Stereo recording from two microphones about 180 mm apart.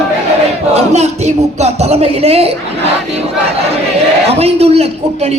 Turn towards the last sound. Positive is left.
turn(degrees=-35)  # may be behind; listen again after turning